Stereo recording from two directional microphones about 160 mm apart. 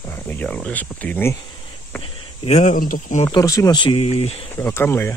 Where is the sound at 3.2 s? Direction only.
20° left (ahead or behind).